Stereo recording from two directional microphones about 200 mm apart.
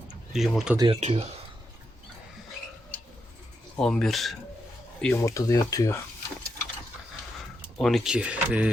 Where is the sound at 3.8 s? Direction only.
5° left (ahead or behind).